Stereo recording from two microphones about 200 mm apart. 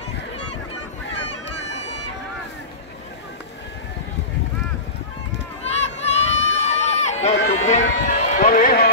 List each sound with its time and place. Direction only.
5.8 s run: 35° left (ahead or behind)